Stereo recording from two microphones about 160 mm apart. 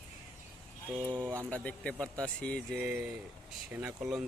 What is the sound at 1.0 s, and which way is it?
Speech, 25° right (ahead or behind).